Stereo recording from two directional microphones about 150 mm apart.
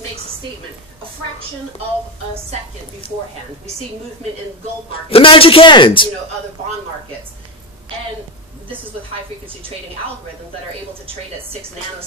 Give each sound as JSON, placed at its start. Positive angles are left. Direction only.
{"t": 4.9, "sound": "a man's voice", "side_deg": 35}